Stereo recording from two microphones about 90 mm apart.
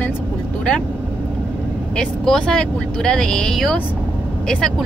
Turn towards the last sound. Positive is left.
turn(degrees=5)  # may be behind; listen again after turning